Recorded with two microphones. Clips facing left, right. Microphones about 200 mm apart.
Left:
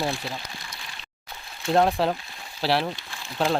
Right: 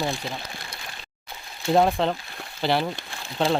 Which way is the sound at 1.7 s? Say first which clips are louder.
Right 1 dB; centre (ahead or behind).